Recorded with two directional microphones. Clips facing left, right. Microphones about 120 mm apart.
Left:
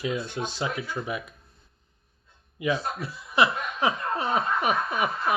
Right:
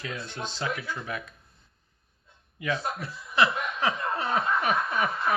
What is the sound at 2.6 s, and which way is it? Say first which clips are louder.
Speech: left 3 dB; 15° left (ahead or behind).